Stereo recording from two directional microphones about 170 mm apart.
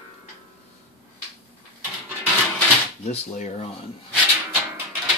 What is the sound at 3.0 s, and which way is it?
Speech, 45° left (ahead or behind).